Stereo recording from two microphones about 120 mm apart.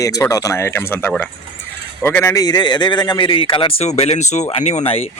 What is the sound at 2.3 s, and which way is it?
Speech, 35° left (ahead or behind).